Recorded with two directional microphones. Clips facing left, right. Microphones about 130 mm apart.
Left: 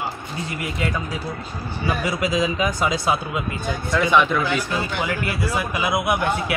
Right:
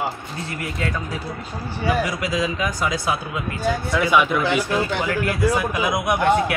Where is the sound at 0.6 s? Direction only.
10° left (ahead or behind).